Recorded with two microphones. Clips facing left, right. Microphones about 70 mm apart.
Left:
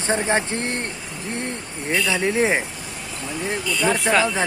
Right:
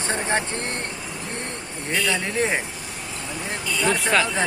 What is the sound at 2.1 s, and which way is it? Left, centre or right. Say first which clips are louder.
Speech: left 5 dB; centre.